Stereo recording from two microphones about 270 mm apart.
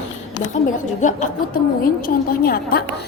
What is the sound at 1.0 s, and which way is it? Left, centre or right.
A woman's voice, left.